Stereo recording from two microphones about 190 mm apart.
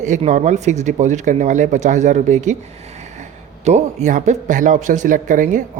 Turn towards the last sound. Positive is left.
turn(degrees=-45)  # may be behind; listen again after turning